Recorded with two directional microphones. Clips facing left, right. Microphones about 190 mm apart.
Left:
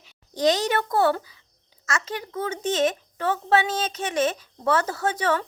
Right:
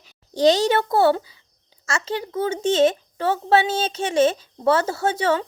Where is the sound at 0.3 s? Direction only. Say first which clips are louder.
Right 5 dB; 30° right (ahead or behind).